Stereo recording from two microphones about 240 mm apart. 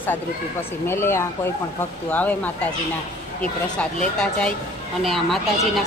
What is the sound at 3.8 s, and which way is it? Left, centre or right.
Speech, centre.